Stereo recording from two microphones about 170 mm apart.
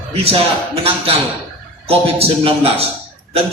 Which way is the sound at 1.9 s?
35° right (ahead or behind).